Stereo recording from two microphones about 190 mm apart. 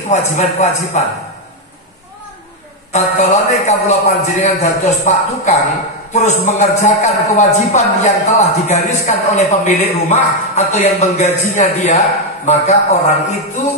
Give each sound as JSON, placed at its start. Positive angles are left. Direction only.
{"t": 0.1, "sound": "a man's voice", "side_deg": 35}
{"t": 2.9, "sound": "a man's voice", "side_deg": 35}